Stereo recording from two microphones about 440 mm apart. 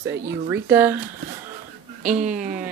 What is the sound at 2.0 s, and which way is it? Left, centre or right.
Speech, centre.